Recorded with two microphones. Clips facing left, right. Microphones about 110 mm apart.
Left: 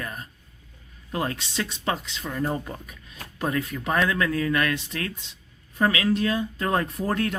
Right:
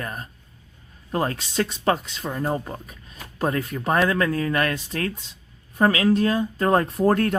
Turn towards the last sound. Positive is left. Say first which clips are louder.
# right 6 dB
turn(degrees=-45)  # may be behind; listen again after turning